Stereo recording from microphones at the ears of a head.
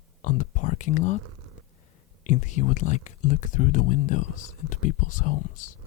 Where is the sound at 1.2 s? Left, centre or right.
Right.